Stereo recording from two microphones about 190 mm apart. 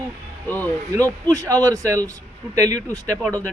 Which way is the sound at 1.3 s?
15° right (ahead or behind).